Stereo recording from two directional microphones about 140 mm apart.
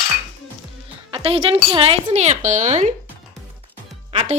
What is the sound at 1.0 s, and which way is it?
Music, 40° right (ahead or behind).